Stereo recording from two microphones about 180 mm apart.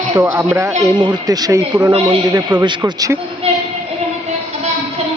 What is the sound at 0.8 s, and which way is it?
Speech, 25° right (ahead or behind).